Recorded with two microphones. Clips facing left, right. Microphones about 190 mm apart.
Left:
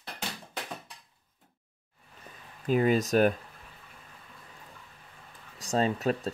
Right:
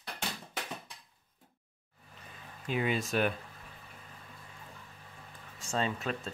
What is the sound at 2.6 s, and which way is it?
Speech, 40° left (ahead or behind).